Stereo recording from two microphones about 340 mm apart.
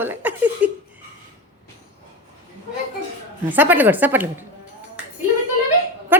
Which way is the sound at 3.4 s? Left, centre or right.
Centre.